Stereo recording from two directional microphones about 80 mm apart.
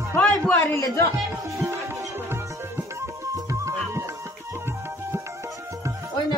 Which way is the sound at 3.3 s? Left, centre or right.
Right.